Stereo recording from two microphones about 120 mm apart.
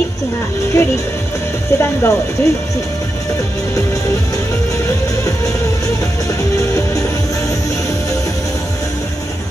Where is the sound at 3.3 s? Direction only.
25° left (ahead or behind).